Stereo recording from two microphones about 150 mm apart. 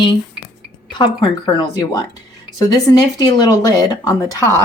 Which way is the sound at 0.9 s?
30° left (ahead or behind).